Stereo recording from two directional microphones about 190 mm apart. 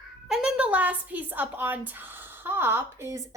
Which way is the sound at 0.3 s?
5° right (ahead or behind).